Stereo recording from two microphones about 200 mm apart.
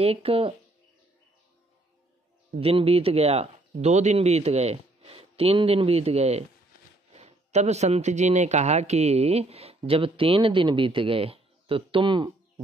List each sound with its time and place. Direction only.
0.0 s speech: 30° right (ahead or behind)
2.6 s speech: 30° right (ahead or behind)